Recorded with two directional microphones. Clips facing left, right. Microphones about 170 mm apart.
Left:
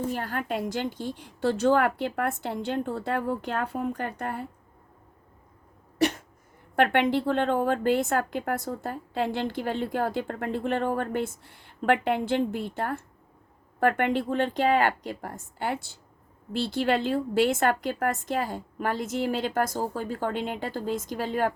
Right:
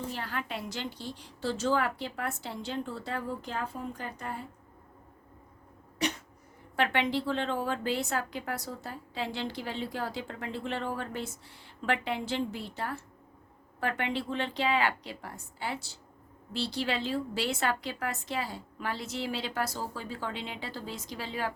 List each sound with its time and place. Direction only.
0.1 s a woman's voice: 45° left (ahead or behind)
6.0 s a sound: 50° left (ahead or behind)
6.7 s a woman's voice: 55° left (ahead or behind)